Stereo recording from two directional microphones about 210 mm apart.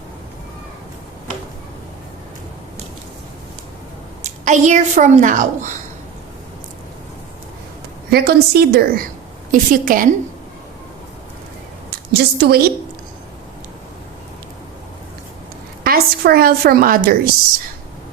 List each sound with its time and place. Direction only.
4.2 s a woman's voice: 35° right (ahead or behind)
8.1 s a woman's voice: 50° right (ahead or behind)
12.1 s a woman's voice: 50° right (ahead or behind)
15.8 s a woman's voice: 45° right (ahead or behind)